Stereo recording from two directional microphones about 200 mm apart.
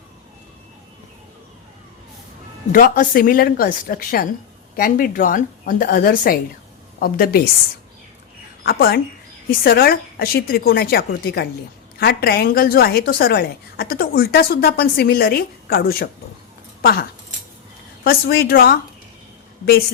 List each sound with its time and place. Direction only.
2.7 s a woman's voice: 45° left (ahead or behind)
8.6 s a woman's voice: 50° left (ahead or behind)